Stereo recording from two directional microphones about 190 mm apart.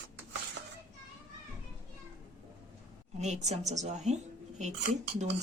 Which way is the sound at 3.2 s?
35° right (ahead or behind).